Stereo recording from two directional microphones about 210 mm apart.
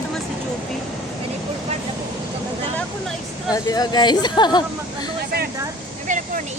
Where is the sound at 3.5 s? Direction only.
20° left (ahead or behind).